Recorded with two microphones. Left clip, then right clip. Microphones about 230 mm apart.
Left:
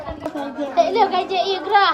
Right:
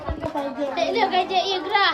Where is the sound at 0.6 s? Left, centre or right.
Centre.